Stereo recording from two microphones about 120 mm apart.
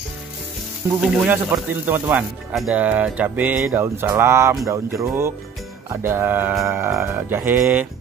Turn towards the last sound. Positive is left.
turn(degrees=-15)  # may be behind; listen again after turning